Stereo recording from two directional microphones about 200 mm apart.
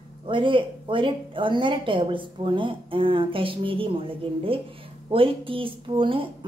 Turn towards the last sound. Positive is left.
turn(degrees=-25)  # may be behind; listen again after turning